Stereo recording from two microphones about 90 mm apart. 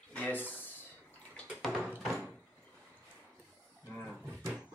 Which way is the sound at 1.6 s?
5° left (ahead or behind).